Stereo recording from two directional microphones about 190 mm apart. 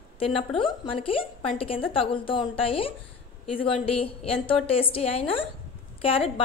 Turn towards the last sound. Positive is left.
turn(degrees=30)  # may be behind; listen again after turning